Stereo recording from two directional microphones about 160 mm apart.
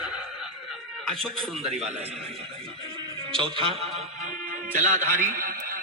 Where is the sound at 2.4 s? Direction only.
35° right (ahead or behind).